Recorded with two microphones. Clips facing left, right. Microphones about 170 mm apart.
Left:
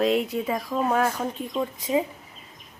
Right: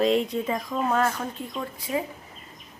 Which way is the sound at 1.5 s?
20° left (ahead or behind).